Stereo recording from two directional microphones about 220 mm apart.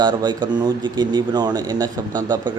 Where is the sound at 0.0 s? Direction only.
20° right (ahead or behind).